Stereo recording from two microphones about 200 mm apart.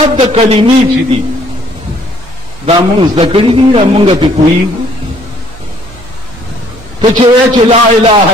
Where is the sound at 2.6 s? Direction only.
30° right (ahead or behind).